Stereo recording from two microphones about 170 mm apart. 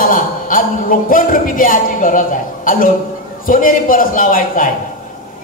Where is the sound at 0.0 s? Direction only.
55° left (ahead or behind).